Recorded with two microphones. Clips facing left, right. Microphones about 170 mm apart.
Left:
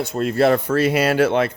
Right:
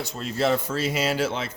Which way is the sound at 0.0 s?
55° left (ahead or behind).